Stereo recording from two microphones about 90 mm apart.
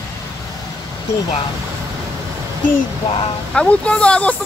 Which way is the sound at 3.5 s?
15° left (ahead or behind).